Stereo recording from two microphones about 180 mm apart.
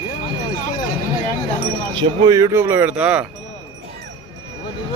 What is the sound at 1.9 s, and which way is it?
Speech, 25° right (ahead or behind).